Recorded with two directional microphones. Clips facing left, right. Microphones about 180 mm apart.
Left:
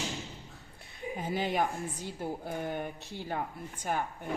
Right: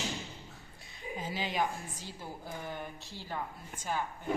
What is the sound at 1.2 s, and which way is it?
Chopping, 55° left (ahead or behind).